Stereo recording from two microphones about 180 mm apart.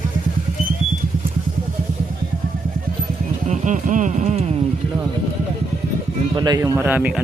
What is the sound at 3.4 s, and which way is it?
Music, 45° right (ahead or behind).